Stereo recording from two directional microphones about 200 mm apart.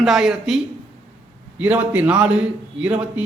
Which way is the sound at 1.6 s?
5° right (ahead or behind).